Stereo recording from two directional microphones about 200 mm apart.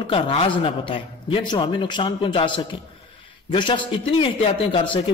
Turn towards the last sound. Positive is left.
turn(degrees=25)  # may be behind; listen again after turning